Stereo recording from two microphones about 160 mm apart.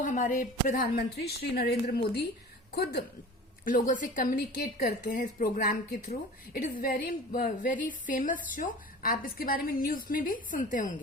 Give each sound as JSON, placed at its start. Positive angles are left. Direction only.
{"t": 0.0, "sound": "a woman's voice", "side_deg": 55}
{"t": 3.8, "sound": "a woman's voice", "side_deg": 55}
{"t": 5.2, "sound": "a woman's voice", "side_deg": 55}